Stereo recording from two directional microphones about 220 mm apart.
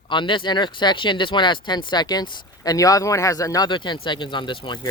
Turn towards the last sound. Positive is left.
turn(degrees=20)  # may be behind; listen again after turning